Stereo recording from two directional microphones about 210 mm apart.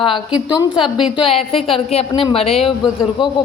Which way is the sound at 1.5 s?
25° left (ahead or behind).